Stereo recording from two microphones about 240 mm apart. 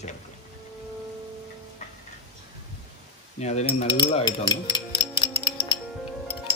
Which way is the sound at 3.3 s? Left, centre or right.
Left.